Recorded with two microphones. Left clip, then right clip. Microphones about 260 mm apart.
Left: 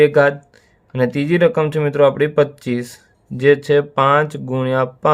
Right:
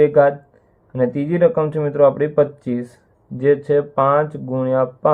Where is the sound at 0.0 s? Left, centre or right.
Left.